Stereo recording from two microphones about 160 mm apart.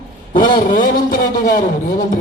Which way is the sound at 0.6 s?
55° left (ahead or behind).